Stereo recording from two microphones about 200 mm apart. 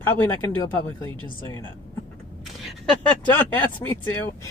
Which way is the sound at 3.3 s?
10° left (ahead or behind).